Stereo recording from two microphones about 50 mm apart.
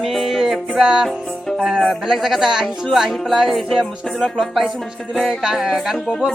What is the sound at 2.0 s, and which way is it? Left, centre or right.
Speech, centre.